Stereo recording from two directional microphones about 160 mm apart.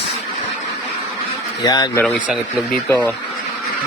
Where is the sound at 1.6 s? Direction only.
25° left (ahead or behind).